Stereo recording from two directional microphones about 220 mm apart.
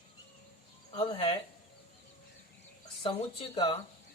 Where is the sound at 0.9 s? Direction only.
20° left (ahead or behind).